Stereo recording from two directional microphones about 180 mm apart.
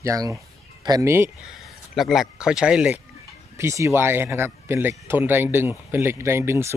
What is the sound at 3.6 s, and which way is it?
Speech, 15° right (ahead or behind).